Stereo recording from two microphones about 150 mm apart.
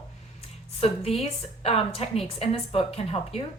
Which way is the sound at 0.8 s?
40° left (ahead or behind).